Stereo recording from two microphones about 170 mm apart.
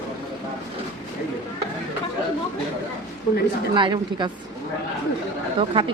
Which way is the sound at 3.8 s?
25° right (ahead or behind).